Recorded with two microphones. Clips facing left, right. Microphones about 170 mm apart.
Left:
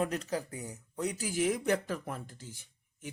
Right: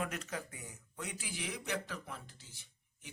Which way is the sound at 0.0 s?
35° left (ahead or behind).